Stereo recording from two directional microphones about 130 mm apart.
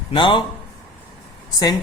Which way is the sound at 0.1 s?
40° left (ahead or behind).